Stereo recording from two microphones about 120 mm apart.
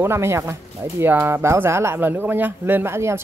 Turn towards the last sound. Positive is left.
turn(degrees=-20)  # may be behind; listen again after turning